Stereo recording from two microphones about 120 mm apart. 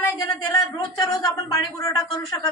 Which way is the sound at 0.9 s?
30° left (ahead or behind).